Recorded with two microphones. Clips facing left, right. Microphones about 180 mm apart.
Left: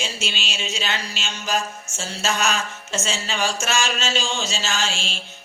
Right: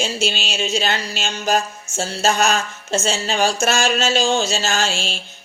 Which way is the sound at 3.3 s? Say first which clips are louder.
Right 6 dB; 35° right (ahead or behind).